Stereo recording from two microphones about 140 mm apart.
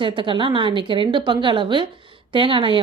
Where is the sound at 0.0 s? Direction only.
35° right (ahead or behind).